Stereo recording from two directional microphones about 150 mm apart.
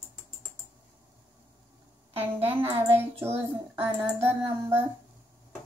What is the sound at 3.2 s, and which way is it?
Child singing, 15° right (ahead or behind).